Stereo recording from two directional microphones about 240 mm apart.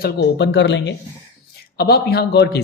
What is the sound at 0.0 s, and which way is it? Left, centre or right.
A man's voice, left.